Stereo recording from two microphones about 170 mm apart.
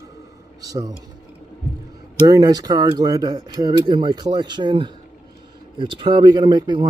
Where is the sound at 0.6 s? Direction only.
20° right (ahead or behind).